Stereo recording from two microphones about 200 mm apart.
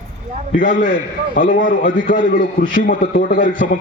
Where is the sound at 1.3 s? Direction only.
45° left (ahead or behind).